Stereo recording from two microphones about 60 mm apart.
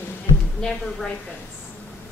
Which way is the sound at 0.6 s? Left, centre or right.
Centre.